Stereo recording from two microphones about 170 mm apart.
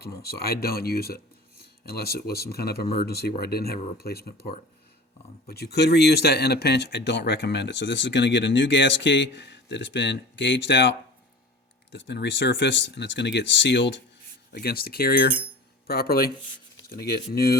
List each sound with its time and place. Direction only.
0.0 s speech: 65° left (ahead or behind)
5.5 s speech: 70° left (ahead or behind); by 14.0 s 90° left
14.5 s speech: 65° left (ahead or behind)